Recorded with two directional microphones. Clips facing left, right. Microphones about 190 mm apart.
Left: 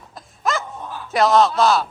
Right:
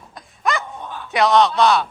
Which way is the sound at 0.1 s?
Centre (ahead or behind).